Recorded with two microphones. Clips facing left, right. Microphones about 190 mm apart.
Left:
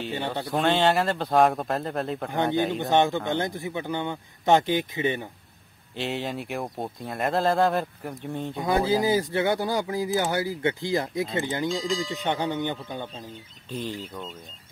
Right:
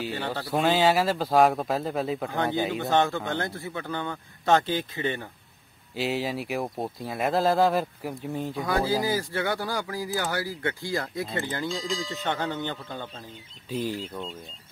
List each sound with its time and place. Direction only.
0.1 s speech: 20° left (ahead or behind)
0.5 s speech: centre (ahead or behind)
2.8 s speech: 15° left (ahead or behind)
5.9 s speech: centre (ahead or behind)
8.6 s speech: 20° left (ahead or behind)
11.7 s speech: centre (ahead or behind)
12.2 s speech: 15° left (ahead or behind)
13.7 s speech: 5° right (ahead or behind)